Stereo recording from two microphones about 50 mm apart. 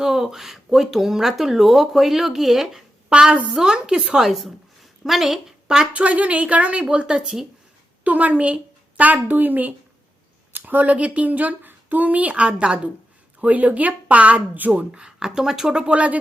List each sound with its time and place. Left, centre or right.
0.0 s speech: centre
3.1 s speech: centre
4.2 s a woman's voice: centre
5.9 s a woman's voice: right
15.0 s speech: centre
15.9 s a woman's voice: right